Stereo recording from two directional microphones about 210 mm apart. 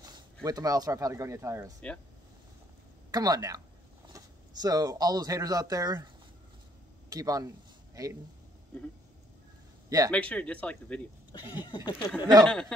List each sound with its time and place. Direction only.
0.0 s speech: 15° right (ahead or behind)
3.1 s speech: 15° right (ahead or behind)
7.1 s speech: 15° right (ahead or behind)
9.8 s speech: 15° right (ahead or behind)
10.1 s speech: 5° left (ahead or behind)
11.3 s a sound: 20° left (ahead or behind)
12.4 s speech: 5° left (ahead or behind)